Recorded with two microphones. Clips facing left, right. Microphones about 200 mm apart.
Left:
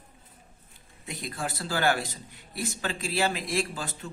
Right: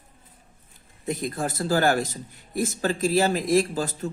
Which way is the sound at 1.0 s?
45° right (ahead or behind).